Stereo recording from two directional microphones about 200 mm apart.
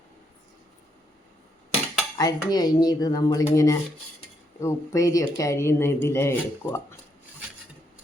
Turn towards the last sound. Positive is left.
turn(degrees=10)  # may be behind; listen again after turning